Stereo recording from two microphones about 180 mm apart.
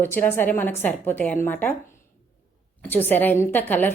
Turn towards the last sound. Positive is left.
turn(degrees=10)  # may be behind; listen again after turning